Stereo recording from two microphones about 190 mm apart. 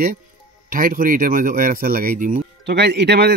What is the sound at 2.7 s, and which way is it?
Speech, 60° right (ahead or behind).